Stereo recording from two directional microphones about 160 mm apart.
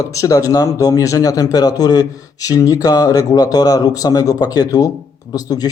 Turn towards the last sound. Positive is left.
turn(degrees=25)  # may be behind; listen again after turning